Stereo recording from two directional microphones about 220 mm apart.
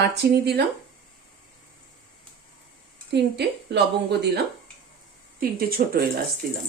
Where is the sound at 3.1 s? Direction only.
50° right (ahead or behind).